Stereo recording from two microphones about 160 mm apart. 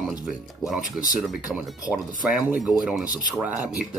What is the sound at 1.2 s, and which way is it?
Speech, 5° right (ahead or behind).